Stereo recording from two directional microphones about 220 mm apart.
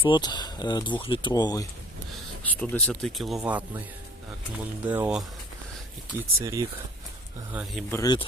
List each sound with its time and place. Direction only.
0.0 s speech: 20° left (ahead or behind)
2.5 s speech: 5° left (ahead or behind); by 6.7 s 15° right (ahead or behind)
7.5 s speech: centre (ahead or behind)
7.9 s speech: 15° left (ahead or behind)